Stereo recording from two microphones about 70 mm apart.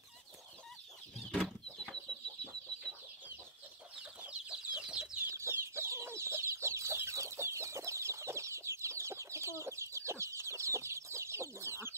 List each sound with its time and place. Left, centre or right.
1.4 s chicken: centre
4.3 s chicken: centre
5.3 s chicken: right